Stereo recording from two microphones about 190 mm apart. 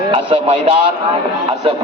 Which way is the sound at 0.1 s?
30° right (ahead or behind).